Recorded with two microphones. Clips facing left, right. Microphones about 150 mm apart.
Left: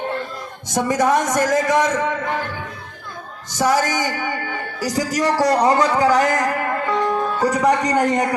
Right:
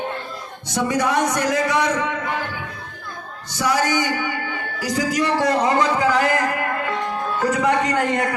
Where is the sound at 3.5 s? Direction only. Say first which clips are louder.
Left 2 dB; 45° left (ahead or behind).